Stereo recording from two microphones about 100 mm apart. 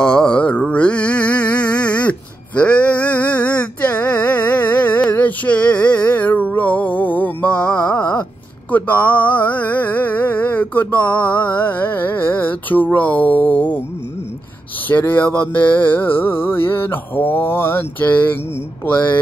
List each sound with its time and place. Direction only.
0.0 s mantra: 10° left (ahead or behind)
8.7 s a sound: 15° left (ahead or behind)
11.4 s mantra: 20° left (ahead or behind)
14.9 s mantra: 20° left (ahead or behind)